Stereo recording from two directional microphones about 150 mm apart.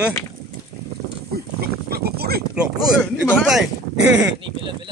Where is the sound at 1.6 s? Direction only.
90° right.